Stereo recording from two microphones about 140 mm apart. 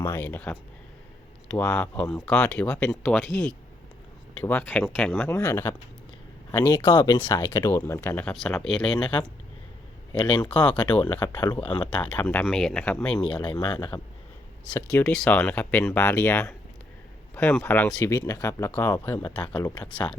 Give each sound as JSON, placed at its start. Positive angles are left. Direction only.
{"t": 0.0, "sound": "speech", "side_deg": 15}
{"t": 10.5, "sound": "speech", "side_deg": 10}
{"t": 11.4, "sound": "speech", "side_deg": 35}
{"t": 11.7, "sound": "speech", "side_deg": 10}
{"t": 13.2, "sound": "speech", "side_deg": 35}
{"t": 15.0, "sound": "speech", "side_deg": 5}